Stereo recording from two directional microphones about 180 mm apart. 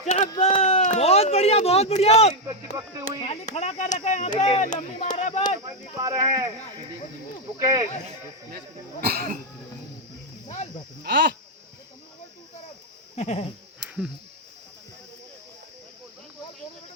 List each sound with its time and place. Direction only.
0.0 s speech: 40° left (ahead or behind)
6.0 s speech: 20° right (ahead or behind)
7.6 s speech: 15° right (ahead or behind)
9.0 s speech: 60° right (ahead or behind)
10.4 s cricket: 40° left (ahead or behind)
11.0 s speech: 70° right (ahead or behind)
13.1 s a sound: 40° left (ahead or behind)